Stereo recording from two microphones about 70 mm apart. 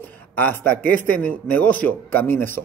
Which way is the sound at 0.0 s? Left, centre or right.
Left.